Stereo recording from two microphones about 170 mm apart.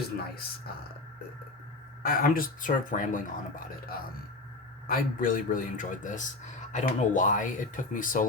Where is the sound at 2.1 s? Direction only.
55° left (ahead or behind).